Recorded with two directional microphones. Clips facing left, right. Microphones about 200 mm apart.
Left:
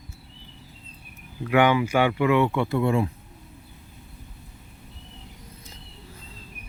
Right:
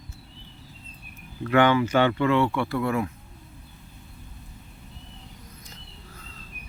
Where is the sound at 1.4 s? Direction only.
10° left (ahead or behind).